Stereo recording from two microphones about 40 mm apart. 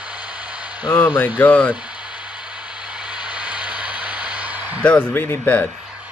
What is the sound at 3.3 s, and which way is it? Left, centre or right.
Vehicle, right.